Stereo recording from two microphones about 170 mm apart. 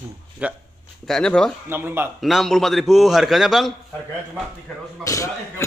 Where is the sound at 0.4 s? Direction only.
5° right (ahead or behind).